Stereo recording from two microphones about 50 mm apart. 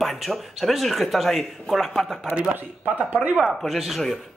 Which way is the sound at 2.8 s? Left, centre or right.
Right.